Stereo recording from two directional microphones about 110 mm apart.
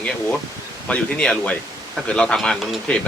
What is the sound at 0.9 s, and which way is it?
A man's voice, 10° left (ahead or behind).